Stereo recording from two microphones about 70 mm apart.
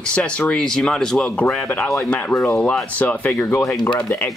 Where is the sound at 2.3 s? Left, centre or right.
Left.